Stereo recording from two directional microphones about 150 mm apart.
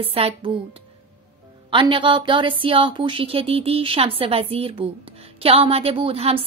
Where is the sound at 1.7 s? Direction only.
35° right (ahead or behind).